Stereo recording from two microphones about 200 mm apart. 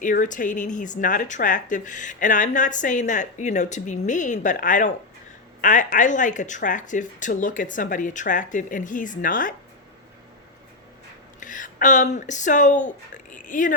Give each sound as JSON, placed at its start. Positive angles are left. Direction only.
{"t": 0.0, "sound": "speech", "side_deg": 40}
{"t": 11.3, "sound": "a sound", "side_deg": 40}
{"t": 12.2, "sound": "speech", "side_deg": 40}